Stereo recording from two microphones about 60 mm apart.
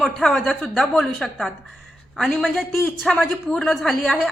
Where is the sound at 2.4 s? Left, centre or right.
Centre.